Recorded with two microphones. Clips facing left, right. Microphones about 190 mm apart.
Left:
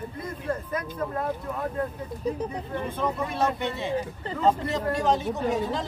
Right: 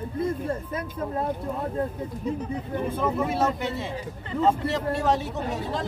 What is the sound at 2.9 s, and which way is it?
Speech, 5° right (ahead or behind).